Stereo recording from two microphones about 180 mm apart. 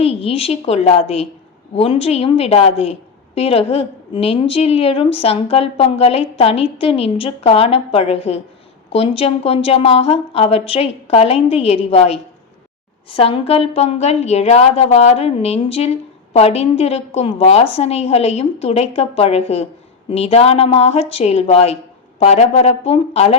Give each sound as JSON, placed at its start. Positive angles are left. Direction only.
{"t": 0.0, "sound": "a woman's voice", "side_deg": 35}